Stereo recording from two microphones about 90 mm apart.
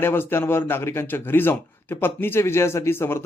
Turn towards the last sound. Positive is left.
turn(degrees=25)  # may be behind; listen again after turning